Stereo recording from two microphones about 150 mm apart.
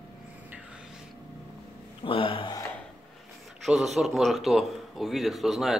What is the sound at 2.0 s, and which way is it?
Speech, 35° left (ahead or behind).